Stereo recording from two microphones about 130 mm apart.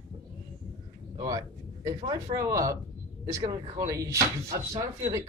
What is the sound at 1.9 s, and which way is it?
Speech, 30° right (ahead or behind).